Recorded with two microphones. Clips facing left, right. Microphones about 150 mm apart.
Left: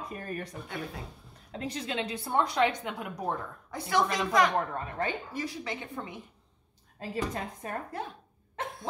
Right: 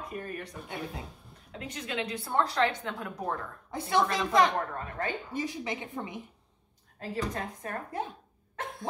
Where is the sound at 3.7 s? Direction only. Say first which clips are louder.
Right 1 dB; 25° right (ahead or behind).